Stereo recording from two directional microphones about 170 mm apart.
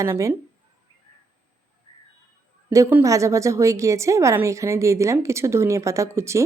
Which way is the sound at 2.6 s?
15° right (ahead or behind).